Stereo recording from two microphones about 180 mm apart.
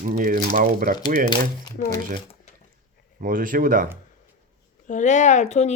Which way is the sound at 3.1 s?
50° right (ahead or behind).